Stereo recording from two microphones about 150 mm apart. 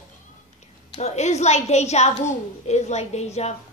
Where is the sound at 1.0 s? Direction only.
50° left (ahead or behind).